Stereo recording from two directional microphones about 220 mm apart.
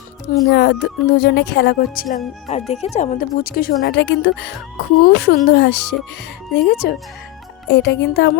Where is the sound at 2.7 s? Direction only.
30° left (ahead or behind).